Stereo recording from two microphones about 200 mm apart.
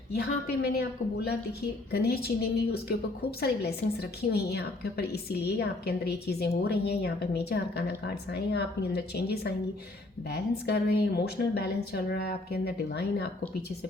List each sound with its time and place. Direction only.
0.1 s a woman's voice: 55° left (ahead or behind)